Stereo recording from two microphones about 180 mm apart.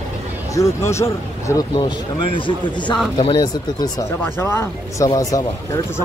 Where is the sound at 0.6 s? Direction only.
15° left (ahead or behind).